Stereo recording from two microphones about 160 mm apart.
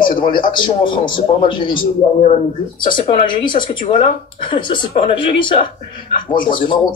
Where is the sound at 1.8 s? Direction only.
50° left (ahead or behind).